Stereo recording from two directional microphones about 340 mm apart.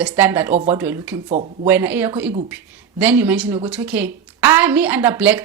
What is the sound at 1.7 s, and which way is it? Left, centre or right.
A woman's voice, centre.